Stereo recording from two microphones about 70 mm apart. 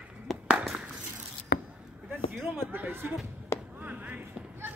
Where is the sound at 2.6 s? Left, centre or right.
Right.